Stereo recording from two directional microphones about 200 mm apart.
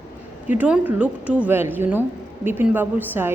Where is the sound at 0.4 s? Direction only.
5° right (ahead or behind).